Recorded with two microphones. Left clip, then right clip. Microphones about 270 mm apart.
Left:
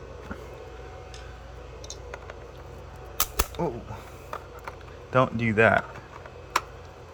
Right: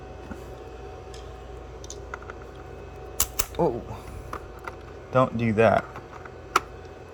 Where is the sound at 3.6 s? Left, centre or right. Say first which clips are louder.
Right 8 dB; left.